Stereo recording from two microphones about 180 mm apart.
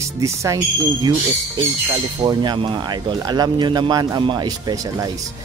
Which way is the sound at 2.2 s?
25° right (ahead or behind).